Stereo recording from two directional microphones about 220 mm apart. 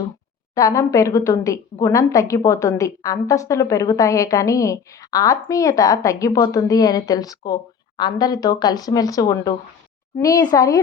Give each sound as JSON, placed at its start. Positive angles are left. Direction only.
{"t": 0.5, "sound": "a woman's voice", "side_deg": 15}